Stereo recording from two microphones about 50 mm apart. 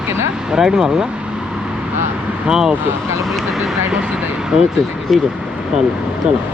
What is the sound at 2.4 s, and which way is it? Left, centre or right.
Speech, centre.